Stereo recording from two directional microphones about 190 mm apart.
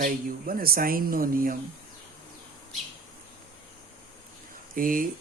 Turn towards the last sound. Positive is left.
turn(degrees=-45)  # may be behind; listen again after turning